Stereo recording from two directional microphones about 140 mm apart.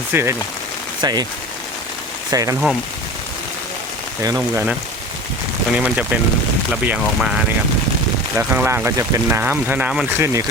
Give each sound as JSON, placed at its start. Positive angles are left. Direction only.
{"t": 0.1, "sound": "speech", "side_deg": -20}
{"t": 1.0, "sound": "speech", "side_deg": -30}
{"t": 2.3, "sound": "speech", "side_deg": -25}
{"t": 4.2, "sound": "speech", "side_deg": -20}
{"t": 5.7, "sound": "speech", "side_deg": -10}
{"t": 8.4, "sound": "speech", "side_deg": -15}
{"t": 10.1, "sound": "speech", "side_deg": -20}